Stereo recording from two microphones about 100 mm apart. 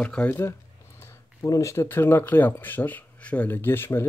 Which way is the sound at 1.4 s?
30° left (ahead or behind).